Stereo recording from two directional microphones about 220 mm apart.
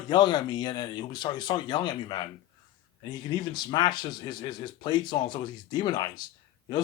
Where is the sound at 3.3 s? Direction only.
20° left (ahead or behind).